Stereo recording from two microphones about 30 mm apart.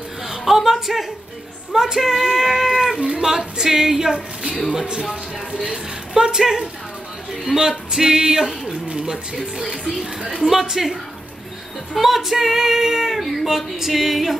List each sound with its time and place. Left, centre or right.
0.2 s a sound: centre
1.7 s music: centre
2.0 s speech: centre
4.1 s a woman's voice: right
5.6 s a woman's voice: right
8.9 s music: centre
10.4 s speech: centre
11.9 s speech: centre
13.1 s speech: centre